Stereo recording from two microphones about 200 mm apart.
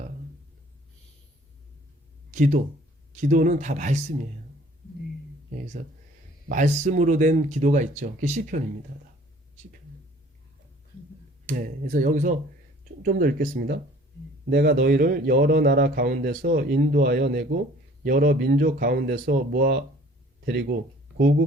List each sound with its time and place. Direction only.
2.3 s speech: 40° right (ahead or behind)
6.5 s speech: 40° right (ahead or behind)
11.4 s a man's voice: 40° right (ahead or behind)